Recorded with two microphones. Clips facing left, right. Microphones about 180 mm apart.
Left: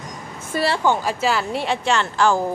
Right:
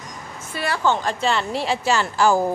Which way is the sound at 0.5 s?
45° left (ahead or behind).